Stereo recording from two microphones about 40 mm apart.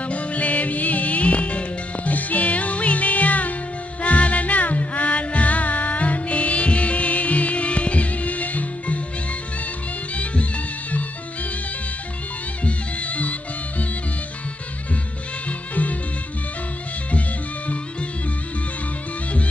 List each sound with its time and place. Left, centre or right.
0.0 s music: left
12.6 s music: left
15.4 s music: left